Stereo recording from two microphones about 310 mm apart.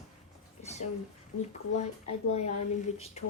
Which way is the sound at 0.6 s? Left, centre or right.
Left.